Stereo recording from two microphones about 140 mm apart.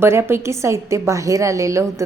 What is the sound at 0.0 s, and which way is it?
A woman's voice, 20° right (ahead or behind).